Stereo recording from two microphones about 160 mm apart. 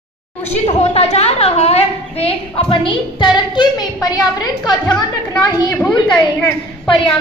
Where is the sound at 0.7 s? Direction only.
40° left (ahead or behind); by 7.0 s 25° left (ahead or behind).